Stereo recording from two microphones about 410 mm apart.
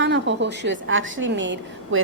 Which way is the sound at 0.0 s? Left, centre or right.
Right.